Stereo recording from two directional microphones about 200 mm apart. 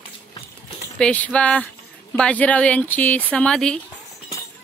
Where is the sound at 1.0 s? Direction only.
5° left (ahead or behind).